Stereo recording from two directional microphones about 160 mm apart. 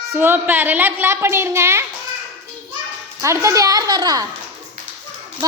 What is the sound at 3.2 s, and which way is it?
A child's voice, 20° right (ahead or behind).